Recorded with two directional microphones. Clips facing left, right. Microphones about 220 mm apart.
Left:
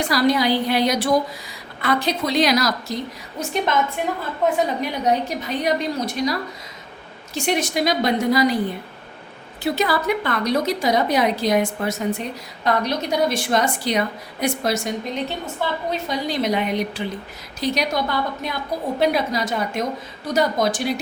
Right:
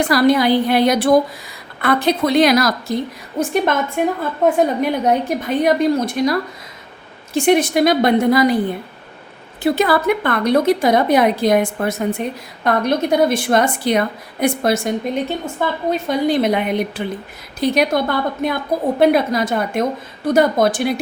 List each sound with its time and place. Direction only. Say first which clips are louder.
0.0 s a woman's voice: right 5 dB; 55° right (ahead or behind)
7.3 s a woman's voice: right 8 dB; 55° right (ahead or behind)
9.6 s a woman's voice: right 5 dB; 55° right (ahead or behind)